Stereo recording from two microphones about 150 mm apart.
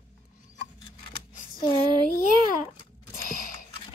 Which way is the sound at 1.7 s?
30° left (ahead or behind).